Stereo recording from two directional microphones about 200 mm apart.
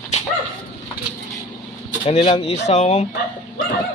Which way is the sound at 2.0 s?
30° left (ahead or behind).